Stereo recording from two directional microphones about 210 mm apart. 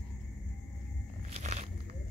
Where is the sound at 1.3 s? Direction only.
30° right (ahead or behind).